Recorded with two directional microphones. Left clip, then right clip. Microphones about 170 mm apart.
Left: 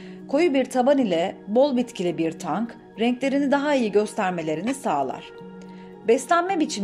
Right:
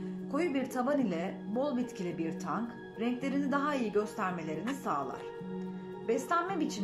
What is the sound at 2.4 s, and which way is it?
Speech, 65° left (ahead or behind).